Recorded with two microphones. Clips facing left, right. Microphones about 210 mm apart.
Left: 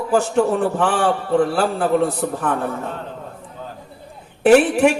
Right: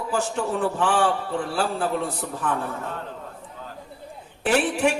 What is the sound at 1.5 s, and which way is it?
Speech, 60° left (ahead or behind).